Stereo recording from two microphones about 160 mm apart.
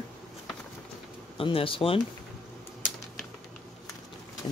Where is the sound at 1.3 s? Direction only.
35° left (ahead or behind).